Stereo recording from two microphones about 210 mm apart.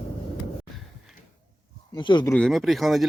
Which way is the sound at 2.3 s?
5° left (ahead or behind).